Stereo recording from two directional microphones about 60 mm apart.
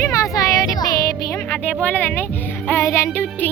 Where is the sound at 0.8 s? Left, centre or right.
Left.